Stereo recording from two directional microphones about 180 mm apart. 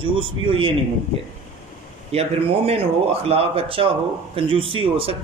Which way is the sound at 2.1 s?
35° right (ahead or behind).